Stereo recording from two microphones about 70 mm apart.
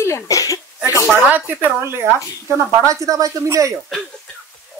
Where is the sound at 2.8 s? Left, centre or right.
Right.